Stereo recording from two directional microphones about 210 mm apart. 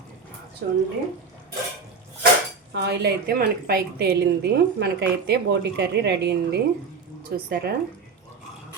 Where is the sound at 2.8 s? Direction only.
50° right (ahead or behind).